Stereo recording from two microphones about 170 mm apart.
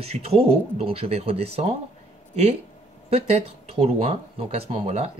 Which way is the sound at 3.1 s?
40° right (ahead or behind).